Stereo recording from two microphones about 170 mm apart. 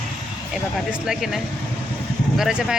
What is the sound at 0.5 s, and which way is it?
Speech, centre (ahead or behind).